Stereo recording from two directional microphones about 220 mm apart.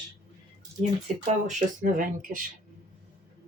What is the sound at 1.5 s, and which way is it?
Speech, 35° right (ahead or behind).